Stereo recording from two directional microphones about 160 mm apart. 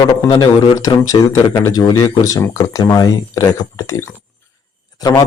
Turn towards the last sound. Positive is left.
turn(degrees=25)  # may be behind; listen again after turning